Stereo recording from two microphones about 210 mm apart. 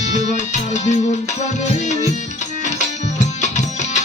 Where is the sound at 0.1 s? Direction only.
35° left (ahead or behind).